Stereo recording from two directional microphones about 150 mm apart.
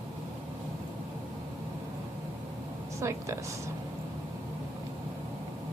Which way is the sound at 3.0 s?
20° right (ahead or behind).